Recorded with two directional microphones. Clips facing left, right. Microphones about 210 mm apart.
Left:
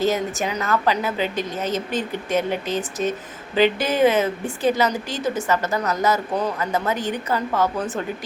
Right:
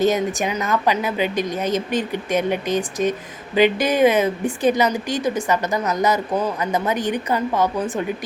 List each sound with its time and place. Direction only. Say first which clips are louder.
0.0 s a woman's voice: right 3 dB; 15° right (ahead or behind)